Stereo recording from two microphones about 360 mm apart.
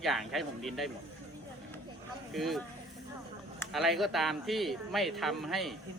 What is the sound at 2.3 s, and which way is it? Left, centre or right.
Speech, centre.